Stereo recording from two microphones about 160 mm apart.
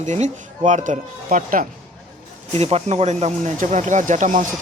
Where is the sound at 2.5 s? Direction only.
40° right (ahead or behind).